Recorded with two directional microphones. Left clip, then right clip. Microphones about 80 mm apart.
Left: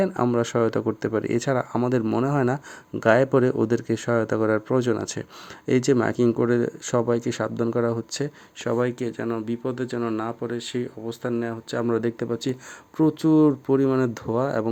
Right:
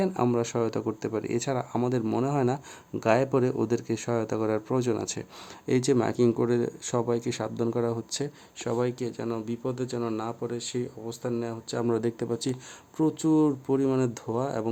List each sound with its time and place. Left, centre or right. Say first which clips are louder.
0.0 s speech: left 4 dB; left
11.9 s speech: left 3 dB; centre
13.0 s speech: left 5 dB; left